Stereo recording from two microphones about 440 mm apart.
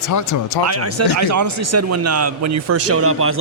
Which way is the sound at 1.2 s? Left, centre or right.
Right.